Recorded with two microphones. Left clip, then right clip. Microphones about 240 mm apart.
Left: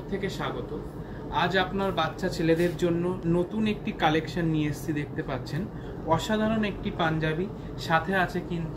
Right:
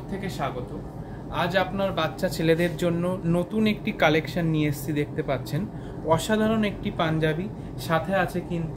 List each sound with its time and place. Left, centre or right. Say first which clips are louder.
1.3 s speech: right 1 dB; right